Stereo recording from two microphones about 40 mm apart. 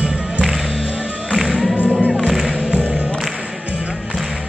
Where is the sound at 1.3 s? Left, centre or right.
Centre.